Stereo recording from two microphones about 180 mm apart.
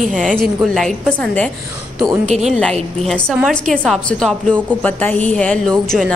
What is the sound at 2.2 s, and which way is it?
Speech, 40° right (ahead or behind).